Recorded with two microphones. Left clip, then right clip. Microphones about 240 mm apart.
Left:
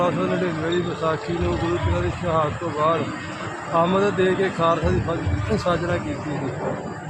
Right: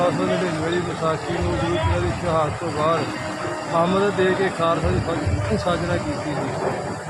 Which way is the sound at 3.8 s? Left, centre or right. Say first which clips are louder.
Even; centre.